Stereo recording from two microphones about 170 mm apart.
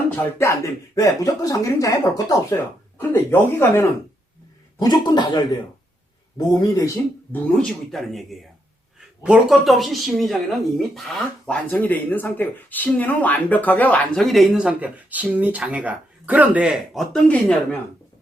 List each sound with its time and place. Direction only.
0.3 s speech: 15° left (ahead or behind)
7.4 s speech: 5° left (ahead or behind)